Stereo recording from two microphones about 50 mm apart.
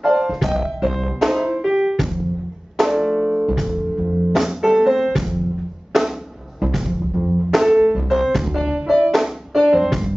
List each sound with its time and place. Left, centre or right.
0.0 s music: centre
5.9 s drum: centre
6.6 s music: centre